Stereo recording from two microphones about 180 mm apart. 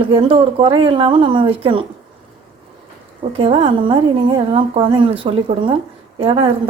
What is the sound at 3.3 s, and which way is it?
A woman's voice, 30° right (ahead or behind).